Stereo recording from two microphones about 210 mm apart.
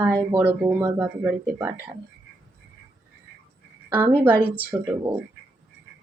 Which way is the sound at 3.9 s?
10° right (ahead or behind).